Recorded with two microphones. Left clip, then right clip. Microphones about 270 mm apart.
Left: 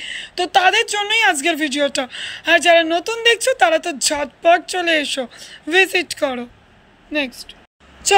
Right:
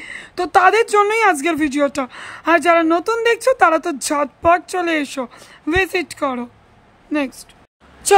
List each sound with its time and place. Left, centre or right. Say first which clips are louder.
0.0 s speech: left 1 dB; centre